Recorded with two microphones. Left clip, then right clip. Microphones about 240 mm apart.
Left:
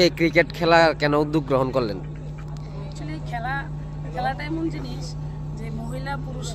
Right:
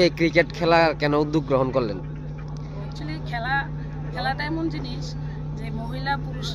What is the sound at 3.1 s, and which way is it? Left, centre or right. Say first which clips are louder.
Vehicle: right 2 dB; centre.